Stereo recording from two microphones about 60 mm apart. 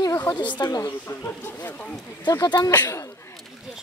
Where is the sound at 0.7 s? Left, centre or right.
Left.